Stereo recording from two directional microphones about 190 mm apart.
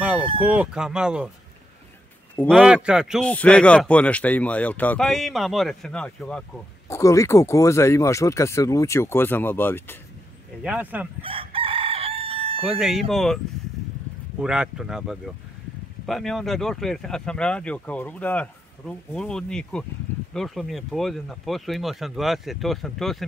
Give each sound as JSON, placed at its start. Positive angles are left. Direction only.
{"t": 0.4, "sound": "speech", "side_deg": -5}
{"t": 2.3, "sound": "speech", "side_deg": 5}
{"t": 2.6, "sound": "speech", "side_deg": -5}
{"t": 6.9, "sound": "speech", "side_deg": 15}
{"t": 10.6, "sound": "speech", "side_deg": -5}
{"t": 11.1, "sound": "chicken", "side_deg": -30}
{"t": 12.6, "sound": "speech", "side_deg": 0}
{"t": 14.4, "sound": "speech", "side_deg": -5}